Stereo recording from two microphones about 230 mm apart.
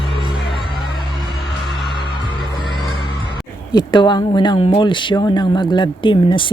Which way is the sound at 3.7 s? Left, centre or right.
Centre.